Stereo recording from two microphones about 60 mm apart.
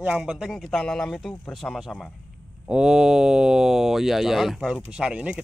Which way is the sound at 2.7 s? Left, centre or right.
Centre.